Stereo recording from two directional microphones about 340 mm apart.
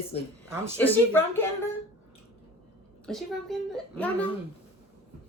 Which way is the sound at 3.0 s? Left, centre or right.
Centre.